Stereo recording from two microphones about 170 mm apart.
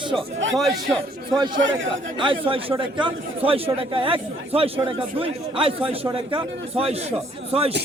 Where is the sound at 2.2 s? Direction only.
30° right (ahead or behind).